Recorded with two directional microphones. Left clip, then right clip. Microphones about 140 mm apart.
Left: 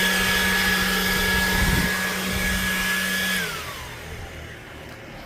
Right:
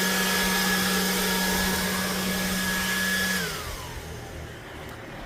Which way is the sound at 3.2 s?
20° left (ahead or behind).